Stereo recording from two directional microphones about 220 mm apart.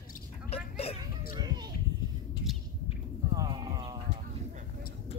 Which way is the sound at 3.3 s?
20° right (ahead or behind).